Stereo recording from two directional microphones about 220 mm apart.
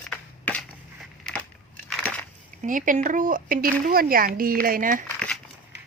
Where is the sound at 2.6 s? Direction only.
35° right (ahead or behind).